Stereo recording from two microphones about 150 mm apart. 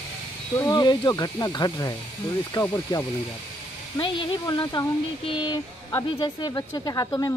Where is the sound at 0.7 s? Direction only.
30° left (ahead or behind).